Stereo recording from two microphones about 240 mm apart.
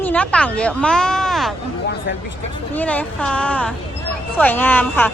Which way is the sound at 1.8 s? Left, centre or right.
Left.